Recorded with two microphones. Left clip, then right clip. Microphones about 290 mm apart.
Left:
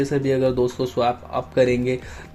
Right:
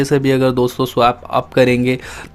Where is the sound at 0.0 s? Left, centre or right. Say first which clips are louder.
Right 6 dB; right.